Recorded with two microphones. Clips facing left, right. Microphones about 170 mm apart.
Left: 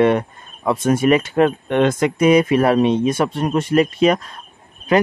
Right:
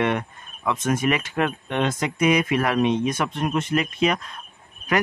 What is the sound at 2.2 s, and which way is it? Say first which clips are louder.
Speech: left 6 dB; 30° left (ahead or behind).